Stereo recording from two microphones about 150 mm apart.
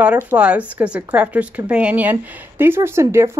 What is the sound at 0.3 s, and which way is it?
Speech, 10° right (ahead or behind).